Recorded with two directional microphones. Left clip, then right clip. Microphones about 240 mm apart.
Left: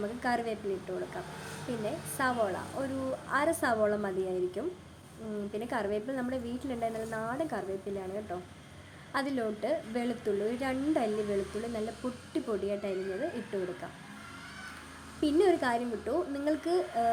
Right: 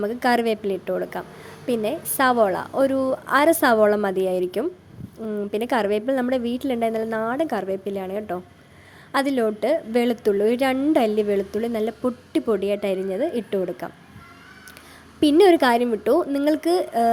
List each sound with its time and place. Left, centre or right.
0.0 s a woman's voice: right
15.2 s a woman's voice: right